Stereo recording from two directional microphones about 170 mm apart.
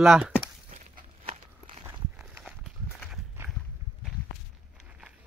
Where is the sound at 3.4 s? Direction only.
15° right (ahead or behind).